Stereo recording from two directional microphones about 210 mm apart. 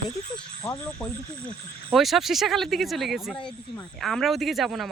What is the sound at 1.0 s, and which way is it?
Speech, centre (ahead or behind).